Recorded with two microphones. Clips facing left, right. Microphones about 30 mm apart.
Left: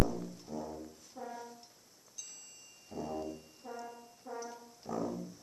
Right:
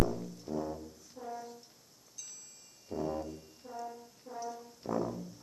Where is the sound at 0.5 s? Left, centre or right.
Right.